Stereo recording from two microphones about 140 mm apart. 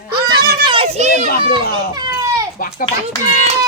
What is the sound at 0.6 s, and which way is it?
Children playing, 40° right (ahead or behind).